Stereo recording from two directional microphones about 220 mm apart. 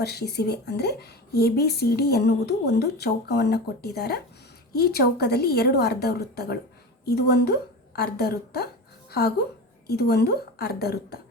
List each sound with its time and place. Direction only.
0.0 s a woman's voice: 45° left (ahead or behind)